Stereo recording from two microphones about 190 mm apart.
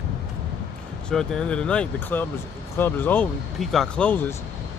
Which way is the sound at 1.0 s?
5° left (ahead or behind).